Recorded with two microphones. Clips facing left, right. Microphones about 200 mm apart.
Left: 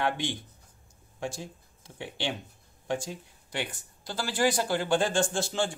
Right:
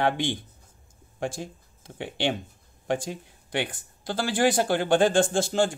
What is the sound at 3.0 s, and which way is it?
Speech, 60° right (ahead or behind).